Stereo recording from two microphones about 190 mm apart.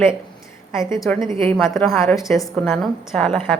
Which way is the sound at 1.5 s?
5° left (ahead or behind).